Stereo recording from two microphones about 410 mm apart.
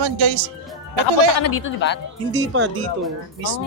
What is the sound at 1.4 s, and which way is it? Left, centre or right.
Speech, left.